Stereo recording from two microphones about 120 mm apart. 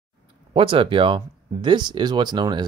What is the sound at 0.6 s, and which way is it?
Speech, 45° right (ahead or behind).